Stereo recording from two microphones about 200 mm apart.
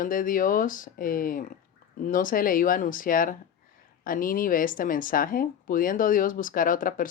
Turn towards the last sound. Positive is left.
turn(degrees=45)  # may be behind; listen again after turning